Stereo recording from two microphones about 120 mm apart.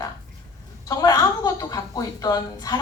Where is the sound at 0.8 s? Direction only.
30° left (ahead or behind).